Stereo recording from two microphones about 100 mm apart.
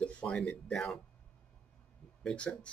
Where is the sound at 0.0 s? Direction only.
10° left (ahead or behind).